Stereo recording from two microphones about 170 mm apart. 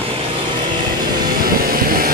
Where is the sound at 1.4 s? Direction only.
60° right (ahead or behind).